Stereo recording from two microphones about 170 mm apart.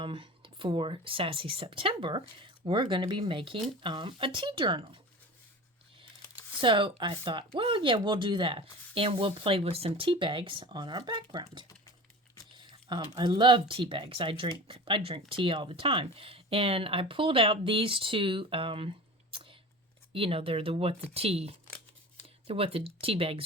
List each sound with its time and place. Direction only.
0.0 s speech: 30° right (ahead or behind)
6.6 s speech: 30° right (ahead or behind)